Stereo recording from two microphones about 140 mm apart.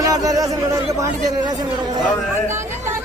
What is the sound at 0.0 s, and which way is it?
Speech, 25° right (ahead or behind).